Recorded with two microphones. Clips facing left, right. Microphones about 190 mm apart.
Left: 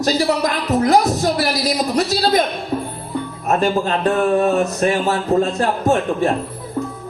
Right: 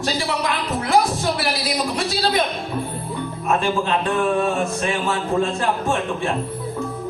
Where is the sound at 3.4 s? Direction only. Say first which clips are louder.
Left 3 dB; 40° left (ahead or behind).